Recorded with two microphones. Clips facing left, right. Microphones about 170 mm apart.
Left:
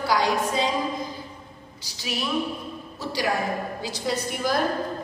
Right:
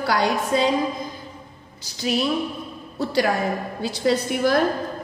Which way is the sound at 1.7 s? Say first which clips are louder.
Right 8 dB; 50° right (ahead or behind).